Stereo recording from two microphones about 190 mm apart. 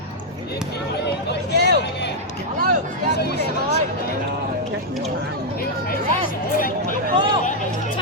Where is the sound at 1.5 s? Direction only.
60° right (ahead or behind).